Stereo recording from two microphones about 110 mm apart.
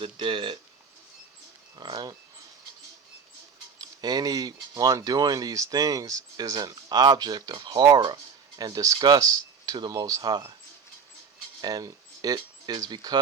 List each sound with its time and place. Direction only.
0.0 s speech: 50° right (ahead or behind)
1.7 s speech: 40° right (ahead or behind)
3.8 s speech: 35° right (ahead or behind)
11.6 s speech: 35° right (ahead or behind)